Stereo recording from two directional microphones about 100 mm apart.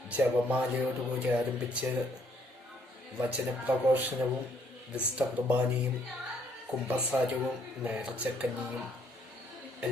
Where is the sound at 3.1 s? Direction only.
15° right (ahead or behind).